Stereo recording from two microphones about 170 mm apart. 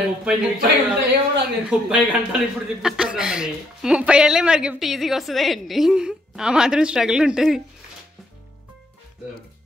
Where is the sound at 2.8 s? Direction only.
5° right (ahead or behind).